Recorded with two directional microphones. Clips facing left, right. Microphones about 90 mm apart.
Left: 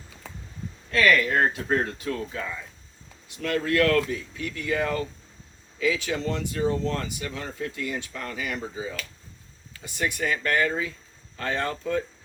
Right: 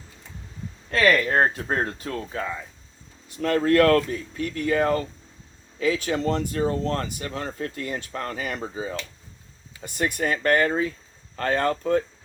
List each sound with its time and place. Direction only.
0.9 s speech: 35° right (ahead or behind)